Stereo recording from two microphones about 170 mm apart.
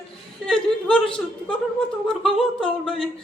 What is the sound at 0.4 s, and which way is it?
Speech, 5° left (ahead or behind).